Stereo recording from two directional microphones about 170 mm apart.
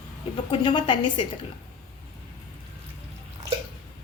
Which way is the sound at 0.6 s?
30° left (ahead or behind).